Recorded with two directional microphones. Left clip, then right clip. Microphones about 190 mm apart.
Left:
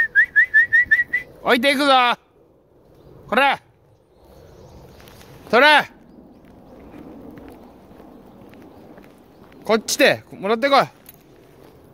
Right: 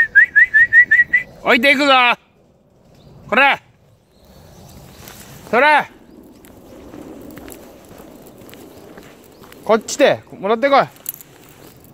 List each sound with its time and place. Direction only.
0.0 s whistling: 5° left (ahead or behind)
1.1 s speech: 5° left (ahead or behind)
3.3 s speech: centre (ahead or behind)
5.5 s speech: 40° left (ahead or behind)
9.7 s speech: 20° left (ahead or behind)